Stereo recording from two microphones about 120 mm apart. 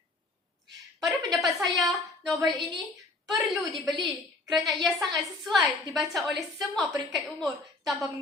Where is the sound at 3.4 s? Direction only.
Centre (ahead or behind).